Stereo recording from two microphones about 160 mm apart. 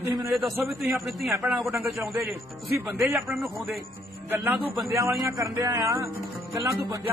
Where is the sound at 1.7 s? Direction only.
15° right (ahead or behind).